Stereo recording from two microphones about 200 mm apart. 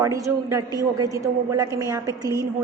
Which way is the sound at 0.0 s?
15° right (ahead or behind).